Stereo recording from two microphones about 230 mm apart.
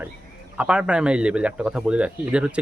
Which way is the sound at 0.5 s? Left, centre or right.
Centre.